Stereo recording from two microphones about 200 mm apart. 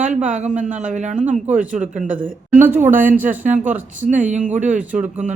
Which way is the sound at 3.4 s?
40° right (ahead or behind).